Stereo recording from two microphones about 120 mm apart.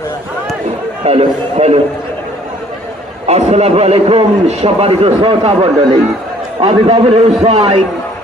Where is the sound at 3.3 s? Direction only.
70° right (ahead or behind); by 5.9 s 55° right (ahead or behind).